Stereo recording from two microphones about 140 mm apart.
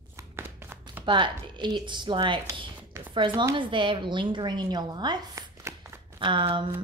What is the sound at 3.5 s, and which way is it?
A woman's voice, 35° right (ahead or behind).